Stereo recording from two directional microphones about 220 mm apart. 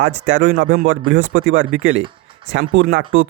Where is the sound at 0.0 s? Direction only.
60° right (ahead or behind).